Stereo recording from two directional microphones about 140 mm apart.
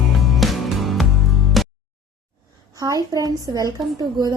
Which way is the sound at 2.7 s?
25° right (ahead or behind).